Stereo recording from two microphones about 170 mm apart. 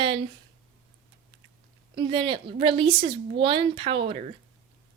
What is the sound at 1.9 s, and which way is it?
Speech, 30° right (ahead or behind).